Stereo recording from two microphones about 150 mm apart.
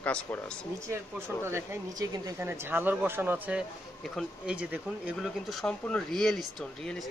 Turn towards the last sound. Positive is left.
turn(degrees=0)  # may be behind; listen again after turning